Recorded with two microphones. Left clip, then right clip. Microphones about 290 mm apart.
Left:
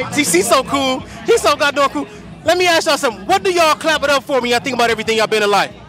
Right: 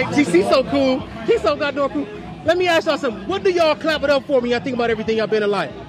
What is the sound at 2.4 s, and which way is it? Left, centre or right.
A man's voice, left.